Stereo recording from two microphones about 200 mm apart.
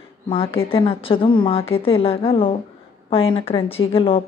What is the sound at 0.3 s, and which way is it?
A woman's voice, 30° left (ahead or behind).